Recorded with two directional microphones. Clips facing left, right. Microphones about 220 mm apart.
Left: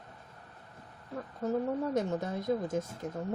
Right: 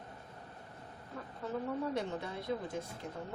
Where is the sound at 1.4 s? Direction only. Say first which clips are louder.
Left 6 dB; 45° left (ahead or behind).